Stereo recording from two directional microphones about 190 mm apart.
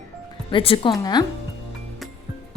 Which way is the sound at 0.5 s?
30° left (ahead or behind).